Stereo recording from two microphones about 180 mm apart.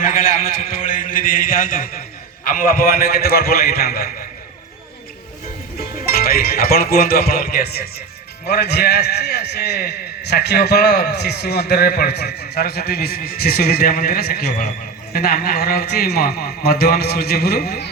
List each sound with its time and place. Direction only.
0.0 s a man's voice: 50° left (ahead or behind)
6.1 s a man's voice: 55° left (ahead or behind)